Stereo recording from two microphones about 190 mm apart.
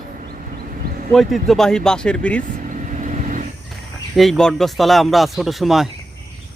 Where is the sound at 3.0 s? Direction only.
40° right (ahead or behind).